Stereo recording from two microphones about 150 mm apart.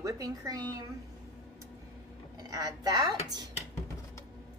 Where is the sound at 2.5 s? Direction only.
25° right (ahead or behind).